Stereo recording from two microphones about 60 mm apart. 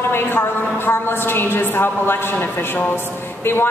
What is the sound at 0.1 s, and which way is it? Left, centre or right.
A woman's voice, left.